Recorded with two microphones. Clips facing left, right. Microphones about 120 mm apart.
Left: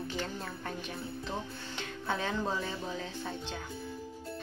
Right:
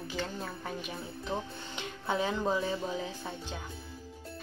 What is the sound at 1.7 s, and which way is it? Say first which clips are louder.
A woman's voice: right 3 dB; 15° right (ahead or behind).